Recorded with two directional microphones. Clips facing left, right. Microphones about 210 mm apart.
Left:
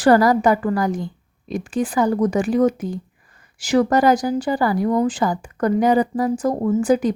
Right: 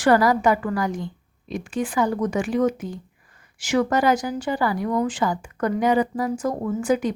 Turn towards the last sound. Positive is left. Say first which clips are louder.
# left 5 dB
turn(degrees=35)  # may be behind; listen again after turning